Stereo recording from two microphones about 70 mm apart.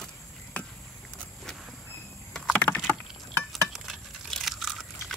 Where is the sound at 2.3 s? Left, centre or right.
Centre.